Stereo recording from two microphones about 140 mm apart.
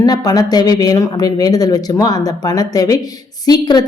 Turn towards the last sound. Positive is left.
turn(degrees=30)  # may be behind; listen again after turning